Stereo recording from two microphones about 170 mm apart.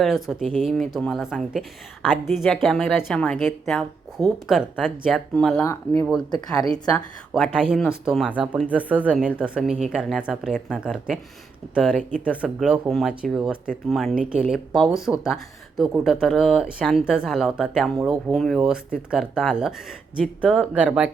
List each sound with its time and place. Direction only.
0.0 s a woman's voice: centre (ahead or behind)
5.6 s speech: 15° left (ahead or behind)
6.1 s a woman's voice: 5° left (ahead or behind)